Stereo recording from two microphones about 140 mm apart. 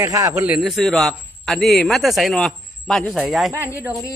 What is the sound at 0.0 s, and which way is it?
Speech, 25° right (ahead or behind).